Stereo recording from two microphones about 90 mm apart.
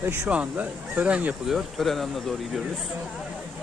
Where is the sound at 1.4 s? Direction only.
Centre (ahead or behind).